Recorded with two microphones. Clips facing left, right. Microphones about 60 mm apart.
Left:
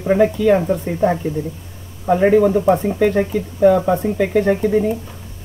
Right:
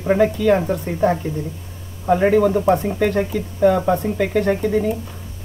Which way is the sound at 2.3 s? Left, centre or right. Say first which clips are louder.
Left 3 dB; centre.